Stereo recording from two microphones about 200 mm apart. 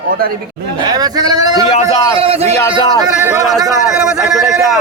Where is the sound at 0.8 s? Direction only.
20° right (ahead or behind).